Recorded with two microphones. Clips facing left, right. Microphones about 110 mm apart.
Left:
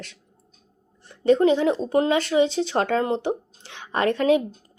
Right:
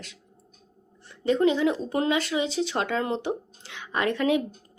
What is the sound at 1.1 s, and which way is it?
A woman's voice, 35° left (ahead or behind).